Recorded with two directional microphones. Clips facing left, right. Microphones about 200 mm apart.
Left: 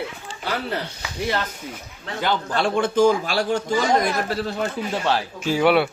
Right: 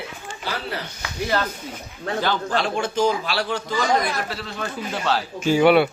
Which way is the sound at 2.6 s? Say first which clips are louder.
Left 7 dB; 55° left (ahead or behind).